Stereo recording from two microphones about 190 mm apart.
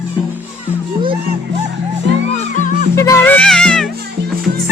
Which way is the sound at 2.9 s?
15° left (ahead or behind).